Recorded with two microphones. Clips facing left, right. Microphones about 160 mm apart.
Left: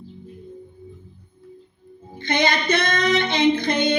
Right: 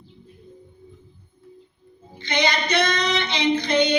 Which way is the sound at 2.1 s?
50° left (ahead or behind).